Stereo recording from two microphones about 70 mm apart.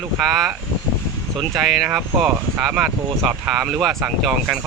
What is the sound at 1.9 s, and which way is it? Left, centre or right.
Speech, right.